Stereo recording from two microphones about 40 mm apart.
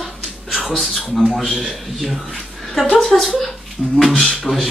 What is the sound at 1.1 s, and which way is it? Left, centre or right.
Speech, centre.